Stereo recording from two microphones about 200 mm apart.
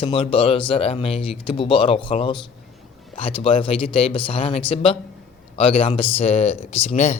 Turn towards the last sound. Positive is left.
turn(degrees=35)  # may be behind; listen again after turning